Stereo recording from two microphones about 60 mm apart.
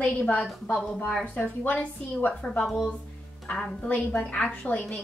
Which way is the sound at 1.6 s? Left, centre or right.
Left.